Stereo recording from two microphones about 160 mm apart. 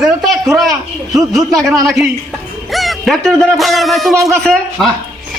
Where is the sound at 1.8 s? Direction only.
Centre (ahead or behind).